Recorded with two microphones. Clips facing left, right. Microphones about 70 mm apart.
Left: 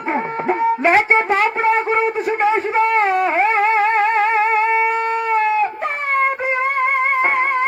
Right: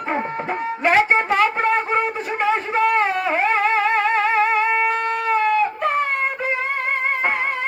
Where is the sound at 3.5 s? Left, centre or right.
Left.